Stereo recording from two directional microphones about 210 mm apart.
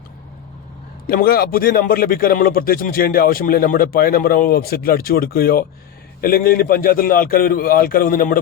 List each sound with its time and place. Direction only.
1.0 s a man's voice: 45° left (ahead or behind)